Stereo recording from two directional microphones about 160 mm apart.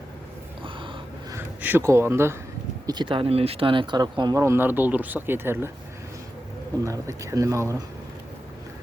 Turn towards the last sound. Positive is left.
turn(degrees=-20)  # may be behind; listen again after turning